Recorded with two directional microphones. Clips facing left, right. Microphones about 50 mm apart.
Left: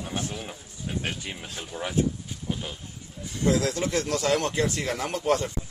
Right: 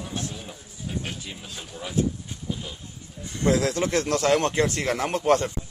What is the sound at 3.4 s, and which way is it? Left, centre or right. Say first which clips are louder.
Speech: right 2 dB; right.